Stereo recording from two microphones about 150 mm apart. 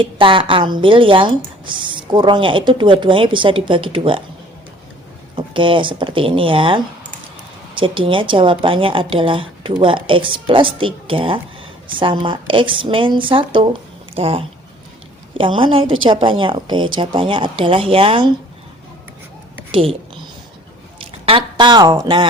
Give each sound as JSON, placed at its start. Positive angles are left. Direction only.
{"t": 0.0, "sound": "speech", "side_deg": -35}
{"t": 5.4, "sound": "speech", "side_deg": -35}
{"t": 19.7, "sound": "speech", "side_deg": -40}
{"t": 21.1, "sound": "speech", "side_deg": -40}